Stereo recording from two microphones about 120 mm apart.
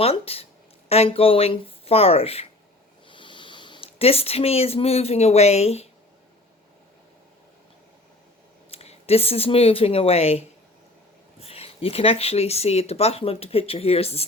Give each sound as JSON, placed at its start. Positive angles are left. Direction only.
{"t": 0.0, "sound": "speech", "side_deg": 55}
{"t": 3.1, "sound": "speech", "side_deg": 45}
{"t": 8.7, "sound": "speech", "side_deg": 60}